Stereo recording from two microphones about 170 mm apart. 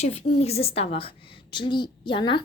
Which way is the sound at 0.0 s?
40° left (ahead or behind).